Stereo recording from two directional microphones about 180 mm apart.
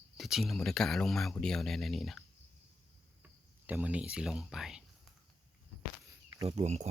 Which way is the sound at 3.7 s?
5° right (ahead or behind).